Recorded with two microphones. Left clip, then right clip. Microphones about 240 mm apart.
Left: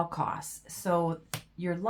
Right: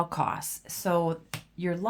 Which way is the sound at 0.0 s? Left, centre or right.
Right.